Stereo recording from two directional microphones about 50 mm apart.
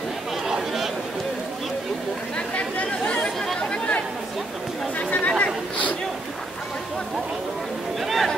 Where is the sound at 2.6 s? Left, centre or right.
Left.